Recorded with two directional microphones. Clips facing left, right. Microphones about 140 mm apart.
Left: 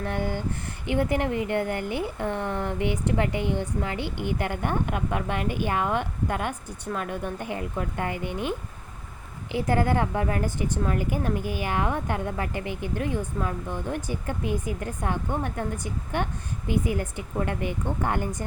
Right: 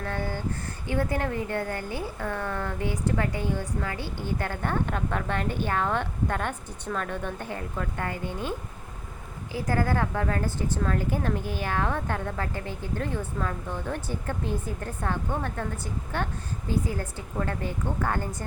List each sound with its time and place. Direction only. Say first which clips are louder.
0.0 s a woman's voice: left 3 dB; 20° left (ahead or behind)